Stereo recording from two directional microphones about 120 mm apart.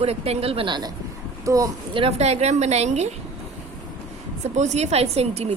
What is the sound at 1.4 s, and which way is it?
Speech, 30° right (ahead or behind).